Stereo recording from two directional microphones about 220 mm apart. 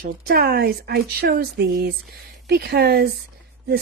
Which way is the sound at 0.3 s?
45° right (ahead or behind).